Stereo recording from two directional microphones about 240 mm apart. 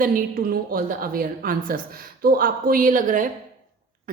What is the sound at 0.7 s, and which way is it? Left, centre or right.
A woman's voice, right.